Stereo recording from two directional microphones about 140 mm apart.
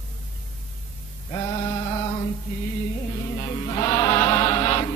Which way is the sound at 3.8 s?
25° left (ahead or behind).